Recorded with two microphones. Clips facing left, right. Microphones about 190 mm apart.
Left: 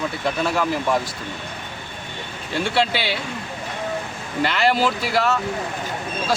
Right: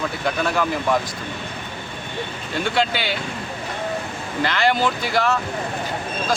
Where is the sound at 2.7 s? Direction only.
Centre (ahead or behind).